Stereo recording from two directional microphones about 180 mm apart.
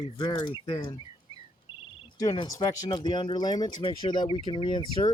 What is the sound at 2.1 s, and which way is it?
Speech, 25° left (ahead or behind).